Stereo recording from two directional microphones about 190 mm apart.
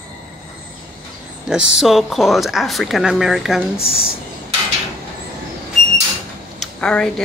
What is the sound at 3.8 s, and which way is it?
Speech, 30° left (ahead or behind).